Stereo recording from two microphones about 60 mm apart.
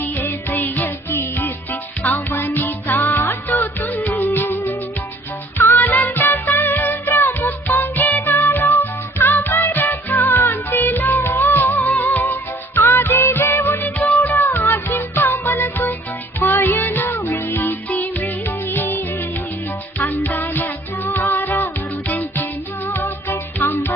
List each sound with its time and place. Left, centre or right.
0.0 s music: left